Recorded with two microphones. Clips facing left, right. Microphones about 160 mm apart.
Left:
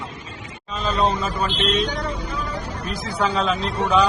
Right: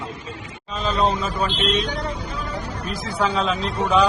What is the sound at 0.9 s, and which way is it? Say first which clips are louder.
Speech: even; centre (ahead or behind).